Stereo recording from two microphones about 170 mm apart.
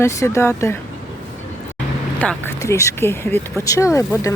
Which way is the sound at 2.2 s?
10° left (ahead or behind).